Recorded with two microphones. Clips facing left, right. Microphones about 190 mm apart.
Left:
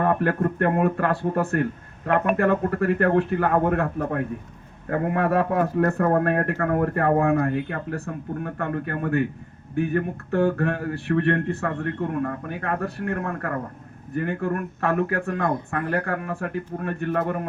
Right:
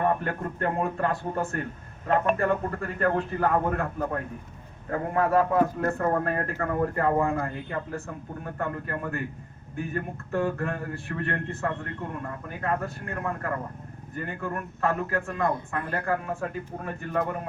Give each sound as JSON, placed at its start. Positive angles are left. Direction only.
{"t": 0.0, "sound": "a man's voice", "side_deg": 70}
{"t": 14.2, "sound": "a man's voice", "side_deg": 65}